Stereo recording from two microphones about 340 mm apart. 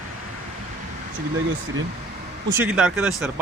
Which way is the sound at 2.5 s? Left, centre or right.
Centre.